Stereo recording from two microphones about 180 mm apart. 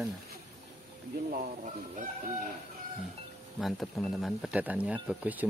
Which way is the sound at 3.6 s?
Centre (ahead or behind).